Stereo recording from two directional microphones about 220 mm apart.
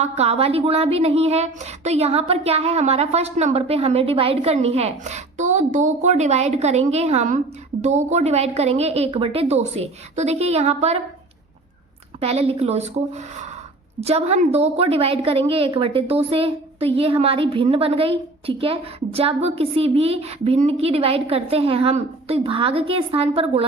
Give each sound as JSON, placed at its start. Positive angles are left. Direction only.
{"t": 0.0, "sound": "a woman's voice", "side_deg": -30}
{"t": 12.2, "sound": "a woman's voice", "side_deg": -30}